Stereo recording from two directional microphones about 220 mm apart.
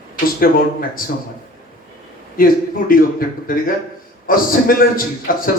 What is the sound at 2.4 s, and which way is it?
Speech, 40° left (ahead or behind).